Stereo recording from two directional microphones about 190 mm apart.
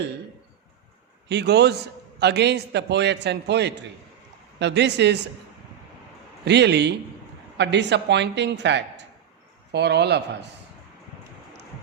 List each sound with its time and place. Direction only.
1.3 s a man's voice: 60° right (ahead or behind)
6.4 s a man's voice: 65° right (ahead or behind)